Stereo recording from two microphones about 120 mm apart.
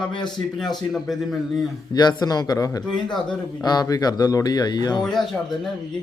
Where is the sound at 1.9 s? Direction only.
35° left (ahead or behind).